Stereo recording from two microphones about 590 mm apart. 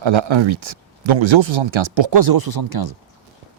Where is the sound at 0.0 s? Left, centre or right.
Right.